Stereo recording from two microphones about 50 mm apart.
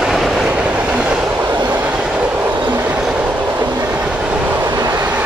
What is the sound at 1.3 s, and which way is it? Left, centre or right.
Train, right.